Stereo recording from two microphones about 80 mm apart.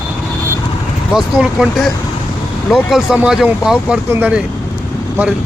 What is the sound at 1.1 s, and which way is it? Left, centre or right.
Speech, centre.